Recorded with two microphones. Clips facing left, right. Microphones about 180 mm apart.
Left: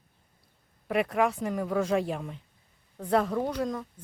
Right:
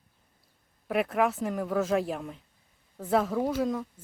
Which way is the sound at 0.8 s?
Centre (ahead or behind).